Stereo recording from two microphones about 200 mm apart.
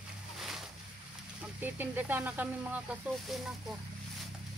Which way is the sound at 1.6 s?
10° right (ahead or behind).